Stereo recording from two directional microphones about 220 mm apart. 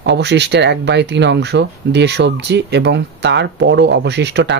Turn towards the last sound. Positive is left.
turn(degrees=-50)  # may be behind; listen again after turning